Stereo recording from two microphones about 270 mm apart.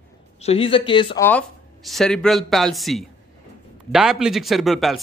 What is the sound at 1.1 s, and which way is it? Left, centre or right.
Speech, centre.